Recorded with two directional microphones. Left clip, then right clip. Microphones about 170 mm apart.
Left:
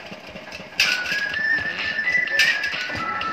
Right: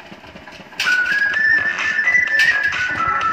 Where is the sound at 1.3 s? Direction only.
45° right (ahead or behind).